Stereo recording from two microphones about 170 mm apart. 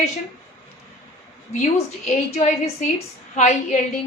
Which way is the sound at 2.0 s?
40° left (ahead or behind).